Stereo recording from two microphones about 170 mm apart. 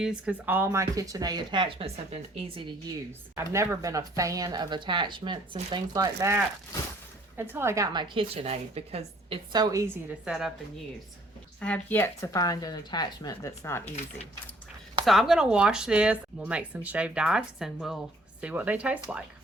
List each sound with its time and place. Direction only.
0.0 s speech: 5° right (ahead or behind); by 2.7 s 35° right (ahead or behind)
3.3 s speech: 15° right (ahead or behind)
7.5 s speech: 15° right (ahead or behind); by 9.4 s 35° right (ahead or behind)
9.5 s speech: 25° right (ahead or behind)
10.2 s speech: 5° right (ahead or behind)
11.6 s a woman's voice: 10° left (ahead or behind)
15.0 s a woman's voice: centre (ahead or behind)